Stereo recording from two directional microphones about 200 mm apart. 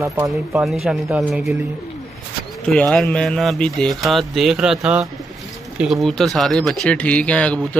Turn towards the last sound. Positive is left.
turn(degrees=5)  # may be behind; listen again after turning